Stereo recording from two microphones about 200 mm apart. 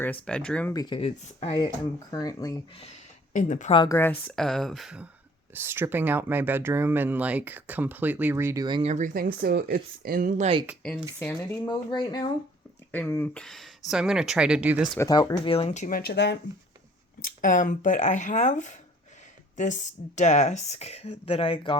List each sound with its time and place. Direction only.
0.3 s speech: 5° left (ahead or behind)
0.7 s speech: 20° left (ahead or behind)
3.3 s speech: 40° left (ahead or behind)
3.8 s speech: 15° left (ahead or behind); by 8.9 s 20° right (ahead or behind)
8.9 s speech: 40° right (ahead or behind)
11.2 s speech: 10° left (ahead or behind)
11.9 s speech: 20° left (ahead or behind)
12.9 s speech: 10° left (ahead or behind)
14.9 s speech: 20° left (ahead or behind)
15.5 s speech: 35° left (ahead or behind); by 16.4 s 55° left (ahead or behind)
17.4 s speech: 40° left (ahead or behind)